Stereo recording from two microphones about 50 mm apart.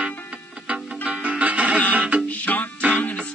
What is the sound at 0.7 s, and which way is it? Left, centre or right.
Music, right.